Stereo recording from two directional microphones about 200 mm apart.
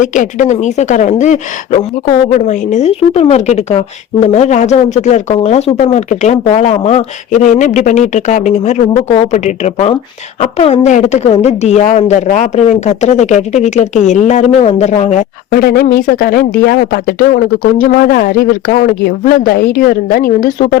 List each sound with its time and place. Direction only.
0.0 s a woman's voice: 40° left (ahead or behind)
15.5 s speech: 50° left (ahead or behind)